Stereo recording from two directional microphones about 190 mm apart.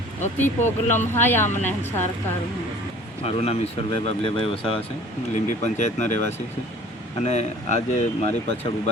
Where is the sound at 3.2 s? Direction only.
30° left (ahead or behind).